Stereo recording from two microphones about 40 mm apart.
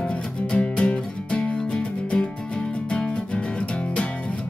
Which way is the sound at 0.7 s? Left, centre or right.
Left.